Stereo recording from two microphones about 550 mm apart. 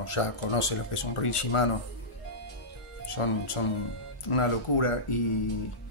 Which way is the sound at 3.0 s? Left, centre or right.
Left.